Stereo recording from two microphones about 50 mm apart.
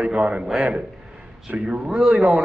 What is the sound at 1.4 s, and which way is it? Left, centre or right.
Speech, centre.